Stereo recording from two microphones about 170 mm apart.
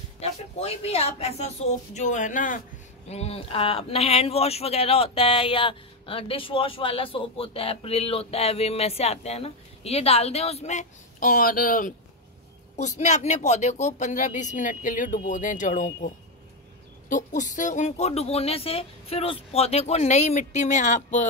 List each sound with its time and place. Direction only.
0.2 s speech: 35° left (ahead or behind)
3.1 s speech: 35° left (ahead or behind); by 11.9 s 55° left (ahead or behind)
12.7 s speech: 40° left (ahead or behind)
17.1 s speech: 50° left (ahead or behind)